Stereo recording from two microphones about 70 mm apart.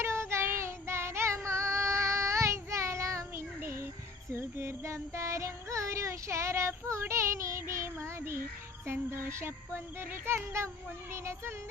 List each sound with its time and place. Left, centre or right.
0.0 s child singing: right
4.3 s music: right
8.9 s speech: right